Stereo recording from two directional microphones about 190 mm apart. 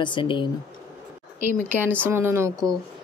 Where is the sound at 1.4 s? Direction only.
10° right (ahead or behind).